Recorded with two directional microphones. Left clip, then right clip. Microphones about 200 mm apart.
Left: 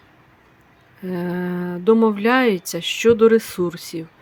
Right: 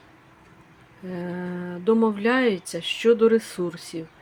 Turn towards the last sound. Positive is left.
turn(degrees=20)  # may be behind; listen again after turning